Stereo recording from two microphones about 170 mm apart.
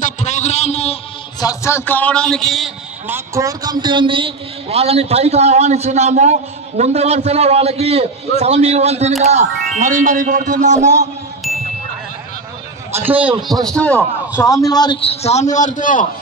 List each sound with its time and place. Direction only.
0.0 s a sound: 45° left (ahead or behind)
1.4 s a man's voice: 20° left (ahead or behind); by 2.7 s centre (ahead or behind)
3.1 s a man's voice: 20° right (ahead or behind); by 11.0 s 45° right (ahead or behind)
12.9 s a man's voice: 10° right (ahead or behind)
13.7 s a man's voice: 10° left (ahead or behind); by 16.1 s 50° left (ahead or behind)